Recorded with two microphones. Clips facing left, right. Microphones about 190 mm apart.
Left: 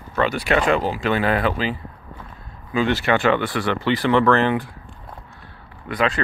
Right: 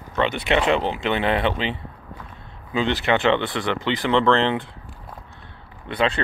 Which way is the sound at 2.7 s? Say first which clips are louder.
Left 2 dB; 20° right (ahead or behind).